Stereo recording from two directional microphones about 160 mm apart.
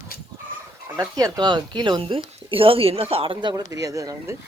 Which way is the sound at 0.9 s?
20° right (ahead or behind).